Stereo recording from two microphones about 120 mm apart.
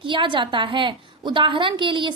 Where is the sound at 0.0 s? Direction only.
45° right (ahead or behind).